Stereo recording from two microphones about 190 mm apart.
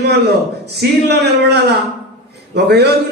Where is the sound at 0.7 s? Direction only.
60° right (ahead or behind).